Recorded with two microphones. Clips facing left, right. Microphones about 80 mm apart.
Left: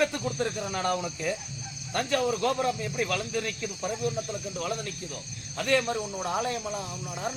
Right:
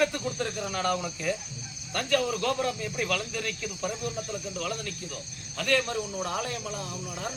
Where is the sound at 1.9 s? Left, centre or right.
Left.